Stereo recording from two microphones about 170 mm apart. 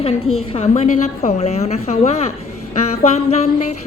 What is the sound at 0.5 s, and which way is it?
A woman's voice, 40° left (ahead or behind).